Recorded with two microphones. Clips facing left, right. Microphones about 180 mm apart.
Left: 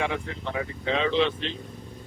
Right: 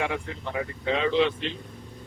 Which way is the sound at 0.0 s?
5° right (ahead or behind).